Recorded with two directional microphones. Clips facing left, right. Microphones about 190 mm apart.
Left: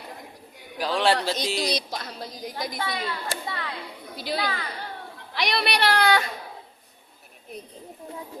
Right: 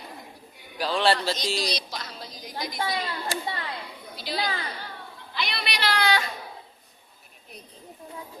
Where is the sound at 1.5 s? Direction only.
55° left (ahead or behind).